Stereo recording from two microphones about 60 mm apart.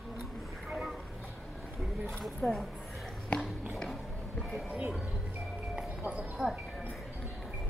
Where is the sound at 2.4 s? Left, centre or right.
Left.